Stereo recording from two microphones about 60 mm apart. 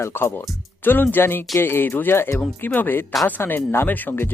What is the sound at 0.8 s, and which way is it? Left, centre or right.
Speech, left.